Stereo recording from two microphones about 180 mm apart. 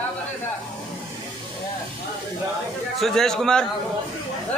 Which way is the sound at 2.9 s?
Centre (ahead or behind).